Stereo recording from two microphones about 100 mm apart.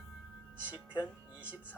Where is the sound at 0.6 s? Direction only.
15° right (ahead or behind).